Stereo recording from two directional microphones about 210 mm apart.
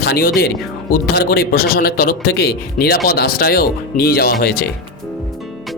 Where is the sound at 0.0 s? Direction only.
50° left (ahead or behind).